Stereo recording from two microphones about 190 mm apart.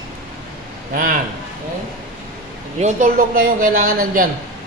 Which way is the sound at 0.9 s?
45° right (ahead or behind).